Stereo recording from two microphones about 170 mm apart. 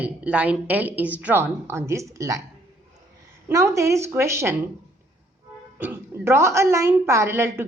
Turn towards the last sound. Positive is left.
turn(degrees=-15)  # may be behind; listen again after turning